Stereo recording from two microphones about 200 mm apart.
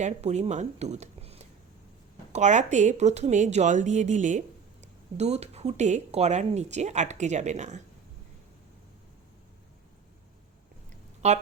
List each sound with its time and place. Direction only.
0.0 s speech: 35° right (ahead or behind)
11.2 s speech: 35° right (ahead or behind)